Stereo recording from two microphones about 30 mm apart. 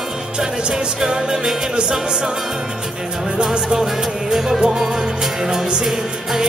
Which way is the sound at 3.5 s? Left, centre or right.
Right.